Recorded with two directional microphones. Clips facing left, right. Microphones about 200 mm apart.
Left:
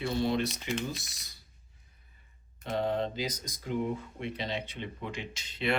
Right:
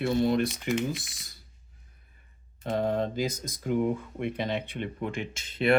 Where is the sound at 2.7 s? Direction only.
45° right (ahead or behind).